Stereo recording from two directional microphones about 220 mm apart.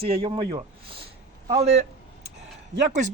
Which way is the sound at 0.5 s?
25° right (ahead or behind).